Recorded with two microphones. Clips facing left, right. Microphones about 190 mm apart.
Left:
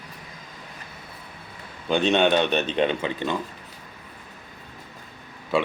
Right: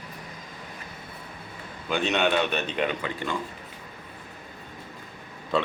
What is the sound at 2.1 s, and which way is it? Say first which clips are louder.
Speech: left 4 dB; 25° left (ahead or behind).